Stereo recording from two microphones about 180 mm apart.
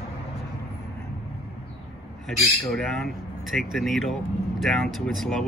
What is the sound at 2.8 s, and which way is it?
Speech, centre (ahead or behind).